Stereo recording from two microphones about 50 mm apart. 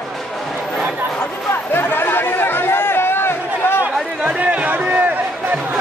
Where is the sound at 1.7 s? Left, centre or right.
Left.